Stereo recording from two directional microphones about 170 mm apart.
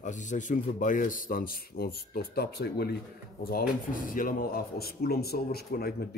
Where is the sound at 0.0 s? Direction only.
45° left (ahead or behind); by 3.0 s 70° left (ahead or behind).